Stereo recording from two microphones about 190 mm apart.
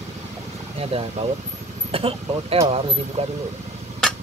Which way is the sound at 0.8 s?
30° right (ahead or behind).